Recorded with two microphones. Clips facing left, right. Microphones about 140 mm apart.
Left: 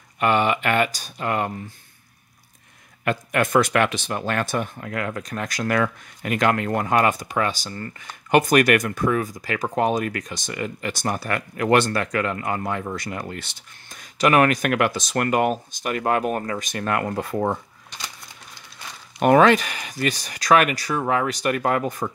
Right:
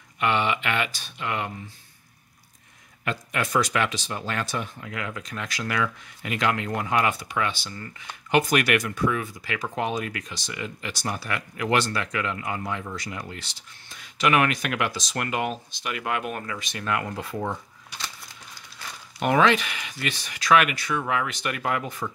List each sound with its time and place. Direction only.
0.2 s speech: 45° left (ahead or behind)
3.1 s speech: 50° left (ahead or behind)
19.1 s speech: 50° left (ahead or behind)